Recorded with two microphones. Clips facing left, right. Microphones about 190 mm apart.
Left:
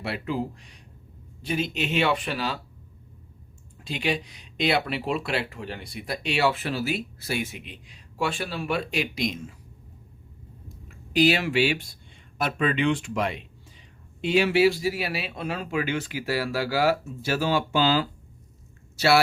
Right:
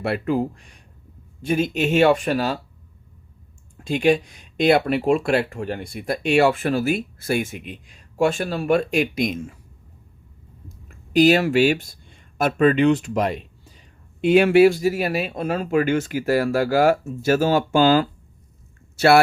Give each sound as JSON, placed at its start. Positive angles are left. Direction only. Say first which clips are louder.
{"t": 0.0, "sound": "speech", "louder": "right 7 dB", "side_deg": -50}
{"t": 3.8, "sound": "speech", "louder": "right 10 dB", "side_deg": -50}
{"t": 10.8, "sound": "speech", "louder": "right 6 dB", "side_deg": -45}
{"t": 14.2, "sound": "speech", "louder": "right 7 dB", "side_deg": -55}